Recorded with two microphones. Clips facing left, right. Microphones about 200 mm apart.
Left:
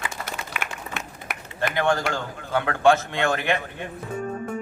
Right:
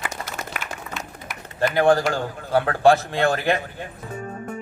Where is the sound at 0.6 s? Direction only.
60° left (ahead or behind).